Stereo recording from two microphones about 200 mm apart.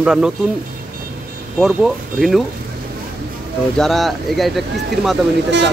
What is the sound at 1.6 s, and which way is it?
Speech, centre (ahead or behind).